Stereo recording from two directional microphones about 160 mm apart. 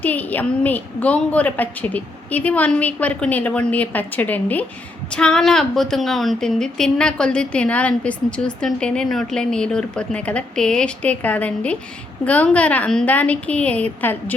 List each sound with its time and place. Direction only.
0.0 s a woman's voice: 10° left (ahead or behind)